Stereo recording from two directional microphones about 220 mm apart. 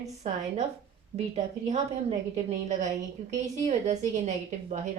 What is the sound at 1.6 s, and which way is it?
A woman's voice, 30° right (ahead or behind).